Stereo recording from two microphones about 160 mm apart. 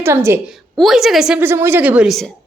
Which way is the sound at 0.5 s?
Centre (ahead or behind).